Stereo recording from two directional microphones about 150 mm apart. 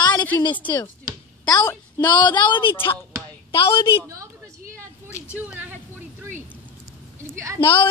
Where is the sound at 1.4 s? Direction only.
25° left (ahead or behind).